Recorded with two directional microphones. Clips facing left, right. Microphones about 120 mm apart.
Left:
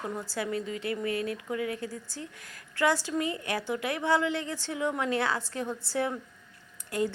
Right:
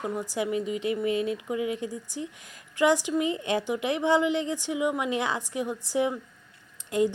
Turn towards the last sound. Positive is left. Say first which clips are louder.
# right 5 dB
turn(degrees=-20)  # may be behind; listen again after turning